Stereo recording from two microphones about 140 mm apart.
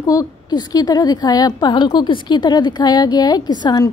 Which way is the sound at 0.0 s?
25° left (ahead or behind).